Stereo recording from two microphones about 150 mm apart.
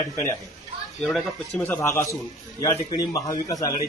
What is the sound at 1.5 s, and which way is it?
A man's voice, 10° left (ahead or behind).